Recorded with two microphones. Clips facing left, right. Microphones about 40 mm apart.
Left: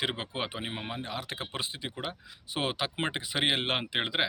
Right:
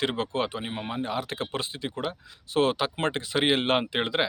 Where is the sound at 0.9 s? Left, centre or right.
Centre.